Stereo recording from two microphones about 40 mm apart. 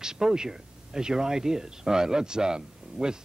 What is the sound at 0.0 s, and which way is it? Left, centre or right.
Speech, centre.